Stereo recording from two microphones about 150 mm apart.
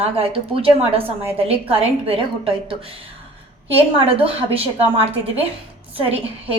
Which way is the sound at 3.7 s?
40° right (ahead or behind).